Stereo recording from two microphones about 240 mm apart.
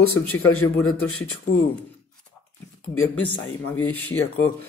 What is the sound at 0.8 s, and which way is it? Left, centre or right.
Speech, left.